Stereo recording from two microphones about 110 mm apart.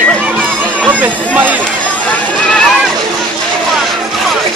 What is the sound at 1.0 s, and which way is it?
Speech, 15° right (ahead or behind).